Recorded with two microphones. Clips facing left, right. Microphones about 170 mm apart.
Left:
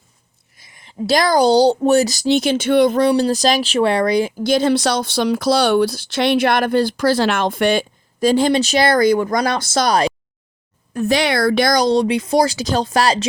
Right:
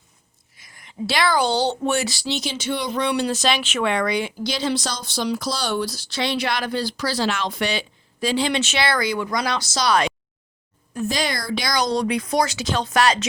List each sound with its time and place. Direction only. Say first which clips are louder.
0.7 s a sound: left 1 dB; 25° left (ahead or behind)
1.0 s speech: left 7 dB; 40° left (ahead or behind)
3.0 s speech: left 7 dB; 35° left (ahead or behind); by 9.9 s 55° left (ahead or behind)
10.9 s speech: left 8 dB; 65° left (ahead or behind)
11.8 s speech: left 6 dB; 25° left (ahead or behind)